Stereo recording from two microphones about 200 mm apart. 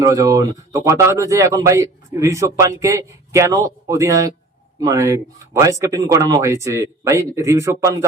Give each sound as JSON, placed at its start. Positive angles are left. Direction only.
{"t": 0.0, "sound": "speech", "side_deg": -15}